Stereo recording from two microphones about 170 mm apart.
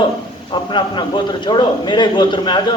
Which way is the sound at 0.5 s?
25° left (ahead or behind).